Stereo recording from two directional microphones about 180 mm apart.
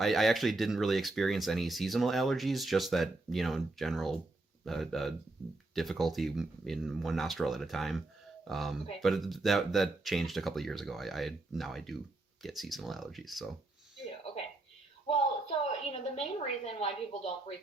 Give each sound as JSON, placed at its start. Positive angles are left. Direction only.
{"t": 0.0, "sound": "speech", "side_deg": 0}
{"t": 15.0, "sound": "a sound", "side_deg": 35}
{"t": 16.6, "sound": "speech", "side_deg": 35}